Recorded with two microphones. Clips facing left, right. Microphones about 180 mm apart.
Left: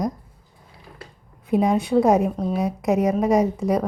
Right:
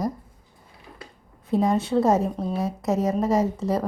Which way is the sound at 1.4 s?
15° left (ahead or behind).